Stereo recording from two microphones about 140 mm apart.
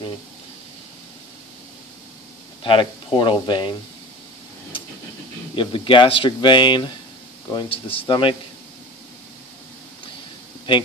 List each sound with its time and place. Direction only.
2.6 s speech: 40° left (ahead or behind)
5.6 s speech: 35° left (ahead or behind)